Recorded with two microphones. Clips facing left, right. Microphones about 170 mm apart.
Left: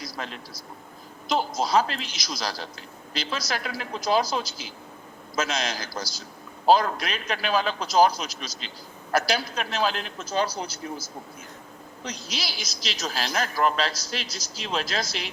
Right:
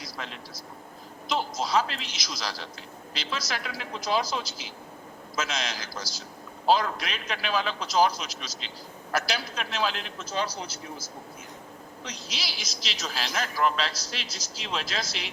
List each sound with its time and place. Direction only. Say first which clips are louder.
0.0 s vehicle: left 4 dB; 40° left (ahead or behind)
1.3 s a man's voice: left 3 dB; 40° left (ahead or behind)
12.0 s a man's voice: left 5 dB; 40° left (ahead or behind)